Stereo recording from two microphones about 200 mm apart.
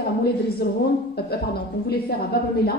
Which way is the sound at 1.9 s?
50° left (ahead or behind).